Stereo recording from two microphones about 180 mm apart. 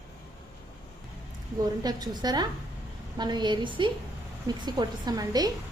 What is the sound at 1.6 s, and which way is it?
A woman's voice, 20° right (ahead or behind).